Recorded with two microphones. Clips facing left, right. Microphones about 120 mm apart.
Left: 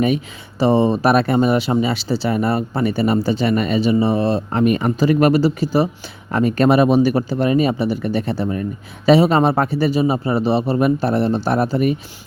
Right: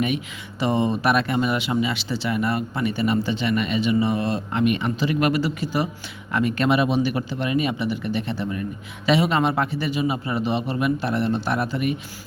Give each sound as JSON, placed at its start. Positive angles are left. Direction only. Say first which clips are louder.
{"t": 0.6, "sound": "speech", "louder": "left 7 dB", "side_deg": 30}